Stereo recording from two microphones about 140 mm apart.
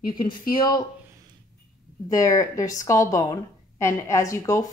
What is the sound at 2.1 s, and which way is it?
A woman's voice, 25° left (ahead or behind).